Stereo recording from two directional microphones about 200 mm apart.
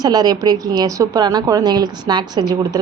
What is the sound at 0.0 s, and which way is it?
A woman's voice, 20° right (ahead or behind).